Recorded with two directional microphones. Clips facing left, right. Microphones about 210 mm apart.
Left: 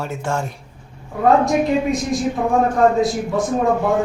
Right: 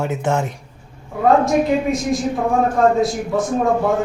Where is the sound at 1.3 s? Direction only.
Centre (ahead or behind).